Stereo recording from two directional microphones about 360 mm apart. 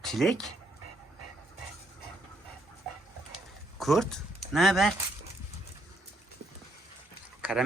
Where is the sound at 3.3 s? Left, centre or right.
Centre.